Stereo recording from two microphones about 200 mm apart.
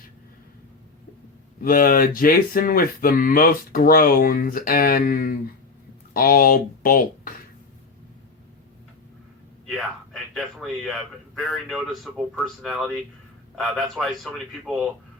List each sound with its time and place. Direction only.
1.6 s speech: 45° left (ahead or behind)
9.6 s a man's voice: centre (ahead or behind)